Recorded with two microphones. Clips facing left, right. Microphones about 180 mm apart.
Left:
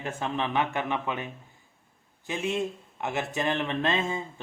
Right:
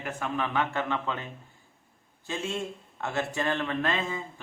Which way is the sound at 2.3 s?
15° left (ahead or behind).